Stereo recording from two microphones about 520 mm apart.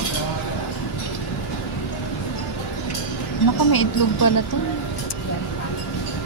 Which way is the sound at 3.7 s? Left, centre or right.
Left.